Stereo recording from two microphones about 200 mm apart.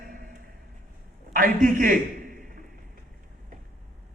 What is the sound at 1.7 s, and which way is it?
Speech, 45° right (ahead or behind).